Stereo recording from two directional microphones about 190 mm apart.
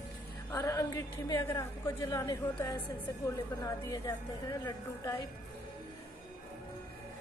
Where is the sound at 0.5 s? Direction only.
15° left (ahead or behind).